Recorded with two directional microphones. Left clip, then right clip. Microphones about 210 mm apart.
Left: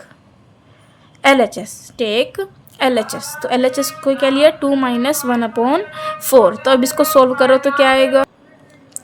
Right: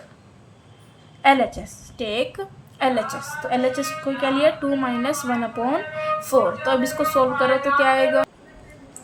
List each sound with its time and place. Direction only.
1.2 s a woman's voice: 55° left (ahead or behind)